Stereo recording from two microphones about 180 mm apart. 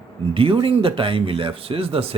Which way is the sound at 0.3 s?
30° right (ahead or behind).